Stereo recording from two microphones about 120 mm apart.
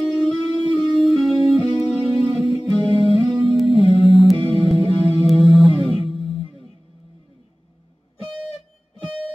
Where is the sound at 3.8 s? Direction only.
55° left (ahead or behind).